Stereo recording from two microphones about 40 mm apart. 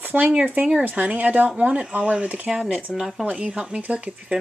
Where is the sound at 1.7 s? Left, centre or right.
Right.